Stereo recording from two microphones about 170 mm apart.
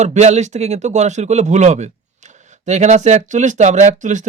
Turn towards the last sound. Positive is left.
turn(degrees=-45)  # may be behind; listen again after turning